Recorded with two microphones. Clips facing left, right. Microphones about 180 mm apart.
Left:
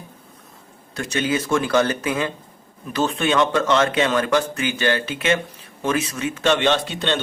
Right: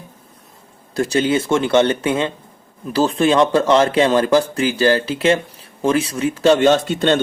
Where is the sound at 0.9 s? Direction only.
35° right (ahead or behind).